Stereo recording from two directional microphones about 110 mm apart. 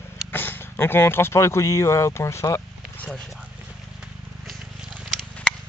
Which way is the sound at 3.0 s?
10° left (ahead or behind).